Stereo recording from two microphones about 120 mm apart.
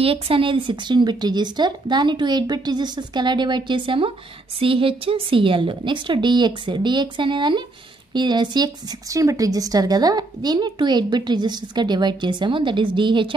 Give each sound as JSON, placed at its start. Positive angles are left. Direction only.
{"t": 0.0, "sound": "a woman's voice", "side_deg": -50}